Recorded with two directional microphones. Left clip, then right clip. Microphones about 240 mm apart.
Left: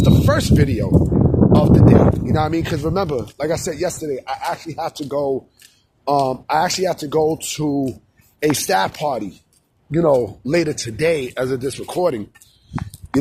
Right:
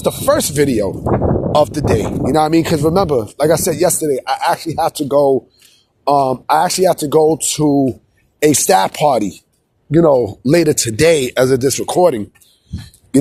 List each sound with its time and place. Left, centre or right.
0.0 s speech: right
11.9 s speech: right